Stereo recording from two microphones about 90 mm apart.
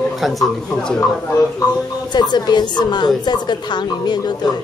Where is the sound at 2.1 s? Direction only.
50° left (ahead or behind).